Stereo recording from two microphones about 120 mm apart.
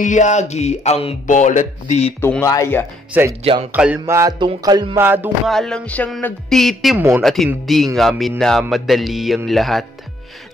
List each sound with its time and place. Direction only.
0.0 s speech: 90° left
2.4 s speech: 25° left (ahead or behind)
3.1 s speech: 20° right (ahead or behind)
3.7 s music: 10° right (ahead or behind)
4.0 s music: 25° right (ahead or behind)
4.4 s music: 35° right (ahead or behind)
4.9 s music: 15° right (ahead or behind)
5.5 s speech: 5° left (ahead or behind)
6.5 s music: centre (ahead or behind)
7.0 s music: 20° right (ahead or behind)
7.6 s music: centre (ahead or behind)